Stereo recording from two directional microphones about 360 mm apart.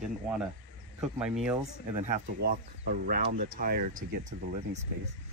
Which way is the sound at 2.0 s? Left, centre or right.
Right.